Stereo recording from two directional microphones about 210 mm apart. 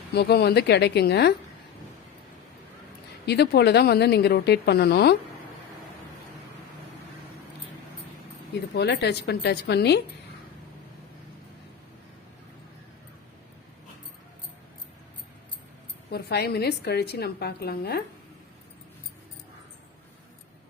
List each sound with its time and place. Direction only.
0.1 s a woman's voice: 50° left (ahead or behind)
3.2 s a woman's voice: 50° left (ahead or behind)
8.7 s a woman's voice: 55° left (ahead or behind)
16.0 s a woman's voice: 50° left (ahead or behind)